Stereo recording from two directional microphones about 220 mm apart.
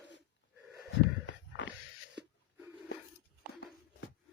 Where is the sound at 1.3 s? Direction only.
55° left (ahead or behind).